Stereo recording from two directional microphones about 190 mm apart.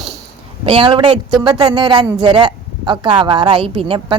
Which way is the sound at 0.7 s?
25° right (ahead or behind).